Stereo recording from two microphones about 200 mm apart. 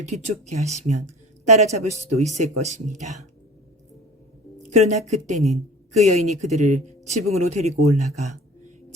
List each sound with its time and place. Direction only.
0.0 s a woman's voice: 35° right (ahead or behind)
4.7 s a woman's voice: 35° right (ahead or behind)